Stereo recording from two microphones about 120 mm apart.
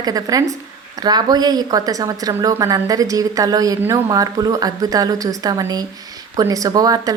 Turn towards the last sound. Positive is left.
turn(degrees=-30)  # may be behind; listen again after turning